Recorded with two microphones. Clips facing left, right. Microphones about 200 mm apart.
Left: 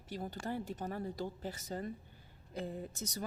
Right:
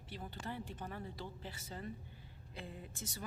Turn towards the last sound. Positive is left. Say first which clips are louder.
# left 7 dB
turn(degrees=40)  # may be behind; listen again after turning